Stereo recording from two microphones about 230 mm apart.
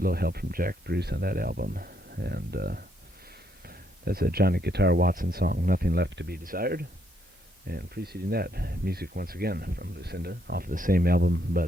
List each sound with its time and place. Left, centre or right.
0.0 s speech: right